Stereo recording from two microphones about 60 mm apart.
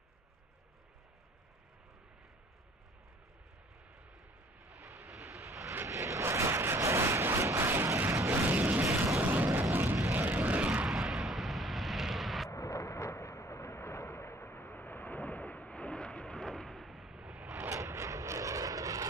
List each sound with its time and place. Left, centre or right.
4.6 s vehicle: right
5.9 s a sound: right
7.6 s a sound: right
9.2 s vehicle: right
10.9 s vehicle: centre
12.4 s vehicle: left; by 17.1 s centre
17.1 s vehicle: centre
17.6 s vehicle: right